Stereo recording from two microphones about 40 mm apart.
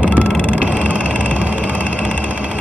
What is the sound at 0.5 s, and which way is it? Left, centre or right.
Vehicle, right.